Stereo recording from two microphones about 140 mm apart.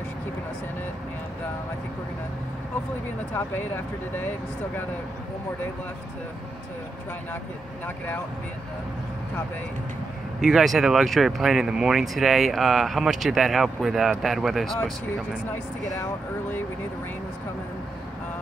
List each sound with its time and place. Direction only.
3.3 s speech: 15° left (ahead or behind)
10.4 s speech: centre (ahead or behind)
16.0 s speech: 15° left (ahead or behind)